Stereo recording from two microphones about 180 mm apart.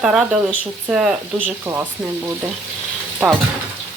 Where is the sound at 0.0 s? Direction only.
5° right (ahead or behind).